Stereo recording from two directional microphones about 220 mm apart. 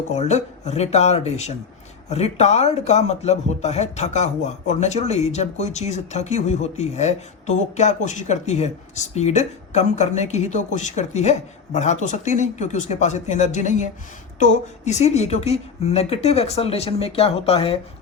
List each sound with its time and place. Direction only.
0.1 s a woman's voice: 30° left (ahead or behind)